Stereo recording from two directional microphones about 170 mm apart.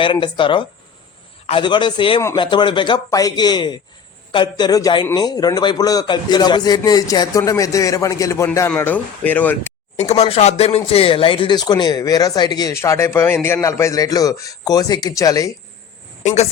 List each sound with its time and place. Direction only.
0.0 s a man's voice: 30° left (ahead or behind); by 9.7 s 10° left (ahead or behind)
10.0 s a man's voice: 40° left (ahead or behind); by 15.5 s 20° left (ahead or behind)
16.2 s a woman's voice: 40° left (ahead or behind)